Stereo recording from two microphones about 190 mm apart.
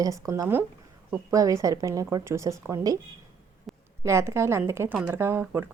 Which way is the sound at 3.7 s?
Centre (ahead or behind).